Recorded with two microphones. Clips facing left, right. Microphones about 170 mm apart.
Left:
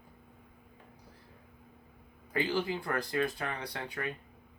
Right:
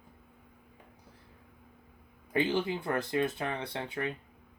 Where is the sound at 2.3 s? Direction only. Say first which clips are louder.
Right 2 dB; 20° right (ahead or behind).